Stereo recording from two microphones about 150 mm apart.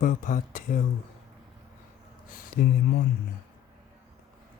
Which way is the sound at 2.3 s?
70° left (ahead or behind).